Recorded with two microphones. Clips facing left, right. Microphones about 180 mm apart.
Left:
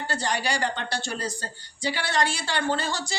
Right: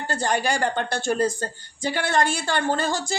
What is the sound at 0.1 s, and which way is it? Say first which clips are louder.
A woman's voice: right 5 dB; 50° right (ahead or behind).